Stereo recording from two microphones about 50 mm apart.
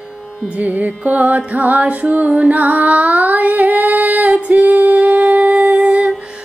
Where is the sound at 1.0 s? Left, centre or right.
Right.